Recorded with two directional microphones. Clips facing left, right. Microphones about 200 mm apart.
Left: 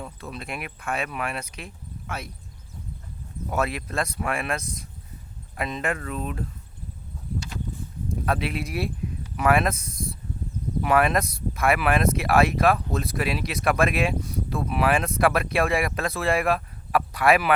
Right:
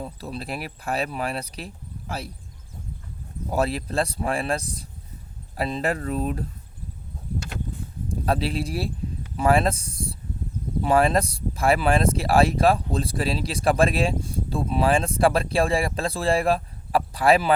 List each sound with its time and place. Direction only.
0.0 s speech: 35° right (ahead or behind)
3.5 s speech: 30° right (ahead or behind)
7.3 s a sound: 55° right (ahead or behind)
8.1 s speech: 30° right (ahead or behind)